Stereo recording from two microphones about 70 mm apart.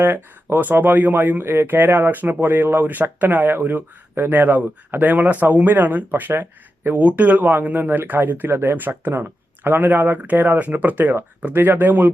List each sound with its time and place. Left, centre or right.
0.0 s speech: right